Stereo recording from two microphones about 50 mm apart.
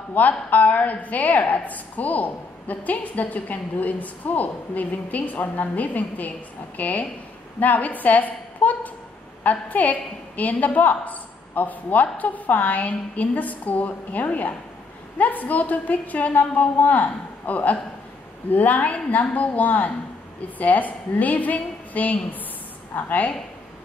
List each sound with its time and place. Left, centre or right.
0.2 s a woman's voice: left